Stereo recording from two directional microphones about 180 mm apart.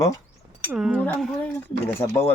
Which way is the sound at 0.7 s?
5° right (ahead or behind).